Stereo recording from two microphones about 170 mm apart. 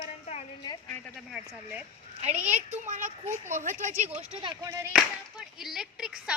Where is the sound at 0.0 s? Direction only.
40° left (ahead or behind).